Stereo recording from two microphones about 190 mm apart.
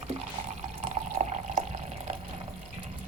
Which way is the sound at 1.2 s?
35° right (ahead or behind).